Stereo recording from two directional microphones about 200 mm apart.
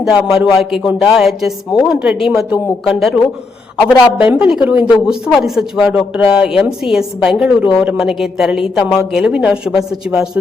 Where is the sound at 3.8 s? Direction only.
20° left (ahead or behind).